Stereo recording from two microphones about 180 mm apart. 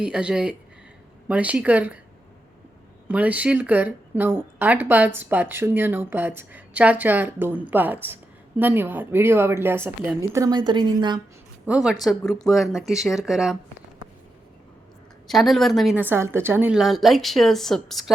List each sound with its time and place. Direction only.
0.0 s a woman's voice: 5° right (ahead or behind)
3.1 s speech: 10° right (ahead or behind)
10.3 s a woman's voice: 20° right (ahead or behind)
11.6 s a woman's voice: 5° right (ahead or behind)
15.3 s a woman's voice: centre (ahead or behind)
16.0 s a woman's voice: 10° right (ahead or behind)